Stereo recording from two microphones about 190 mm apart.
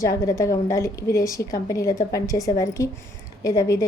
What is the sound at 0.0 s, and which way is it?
A woman's voice, 15° left (ahead or behind).